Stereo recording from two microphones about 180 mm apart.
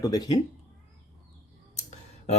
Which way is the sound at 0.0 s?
20° left (ahead or behind).